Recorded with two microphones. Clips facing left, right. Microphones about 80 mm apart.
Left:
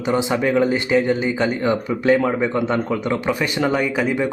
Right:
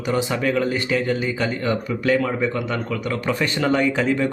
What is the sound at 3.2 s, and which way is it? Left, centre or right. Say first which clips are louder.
A man's voice: right 1 dB; centre.